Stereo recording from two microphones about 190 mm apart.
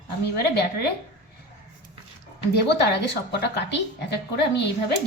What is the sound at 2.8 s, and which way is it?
A woman's voice, 60° left (ahead or behind).